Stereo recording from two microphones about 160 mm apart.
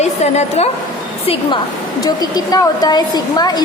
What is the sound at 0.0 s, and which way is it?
Speech, 45° left (ahead or behind).